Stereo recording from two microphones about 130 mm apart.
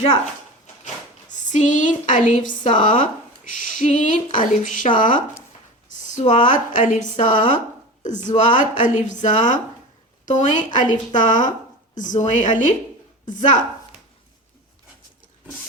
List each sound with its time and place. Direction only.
1.3 s a sound: 75° left (ahead or behind)
2.4 s speech: 80° left
5.9 s speech: 70° left (ahead or behind)